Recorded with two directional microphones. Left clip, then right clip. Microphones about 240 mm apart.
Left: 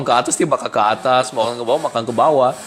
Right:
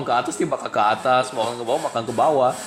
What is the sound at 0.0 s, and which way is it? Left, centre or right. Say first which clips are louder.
A man's voice: left 5 dB; left.